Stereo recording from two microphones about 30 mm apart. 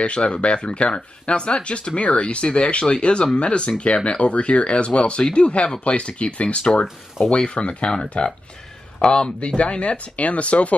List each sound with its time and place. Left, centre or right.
0.0 s speech: left
2.0 s speech: left
6.6 s speech: left
9.0 s speech: left
9.6 s speech: left